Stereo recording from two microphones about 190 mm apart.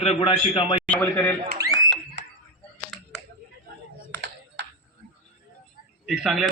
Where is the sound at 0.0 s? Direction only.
35° left (ahead or behind).